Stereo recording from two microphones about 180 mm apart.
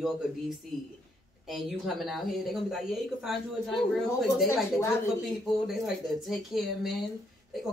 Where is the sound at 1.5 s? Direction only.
Centre (ahead or behind).